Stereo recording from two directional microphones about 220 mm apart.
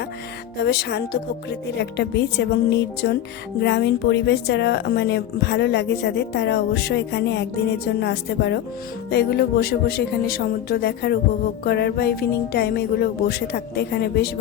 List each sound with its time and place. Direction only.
0.6 s speech: 50° left (ahead or behind)